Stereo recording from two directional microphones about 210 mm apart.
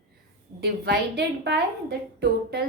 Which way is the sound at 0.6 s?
50° right (ahead or behind).